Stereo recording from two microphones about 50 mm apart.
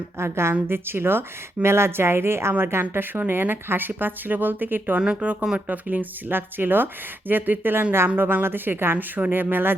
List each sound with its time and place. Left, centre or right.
0.2 s a woman's voice: right
4.9 s speech: right